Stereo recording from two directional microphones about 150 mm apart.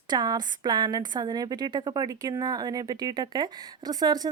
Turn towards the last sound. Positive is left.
turn(degrees=-25)  # may be behind; listen again after turning